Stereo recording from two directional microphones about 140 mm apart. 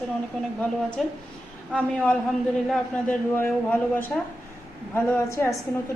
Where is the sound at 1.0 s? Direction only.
Centre (ahead or behind).